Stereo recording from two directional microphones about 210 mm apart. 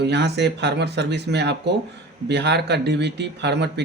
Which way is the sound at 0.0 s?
55° right (ahead or behind).